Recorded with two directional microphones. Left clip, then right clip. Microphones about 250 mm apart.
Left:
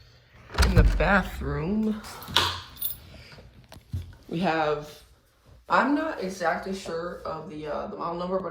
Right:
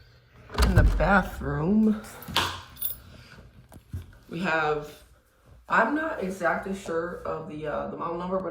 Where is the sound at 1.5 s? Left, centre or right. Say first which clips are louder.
Right 4 dB; right.